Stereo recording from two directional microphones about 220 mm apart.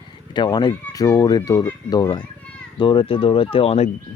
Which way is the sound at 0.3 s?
20° left (ahead or behind).